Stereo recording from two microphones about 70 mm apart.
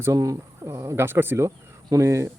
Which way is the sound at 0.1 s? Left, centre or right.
Right.